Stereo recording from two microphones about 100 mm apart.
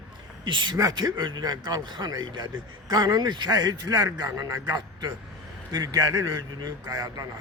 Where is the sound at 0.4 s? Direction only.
50° right (ahead or behind).